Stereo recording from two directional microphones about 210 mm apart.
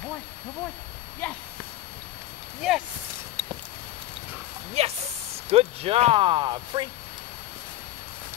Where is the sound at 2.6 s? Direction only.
Centre (ahead or behind).